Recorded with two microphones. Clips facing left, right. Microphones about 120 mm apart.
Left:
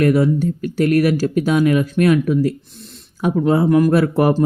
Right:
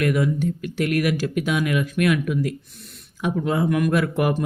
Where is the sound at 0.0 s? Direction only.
35° left (ahead or behind).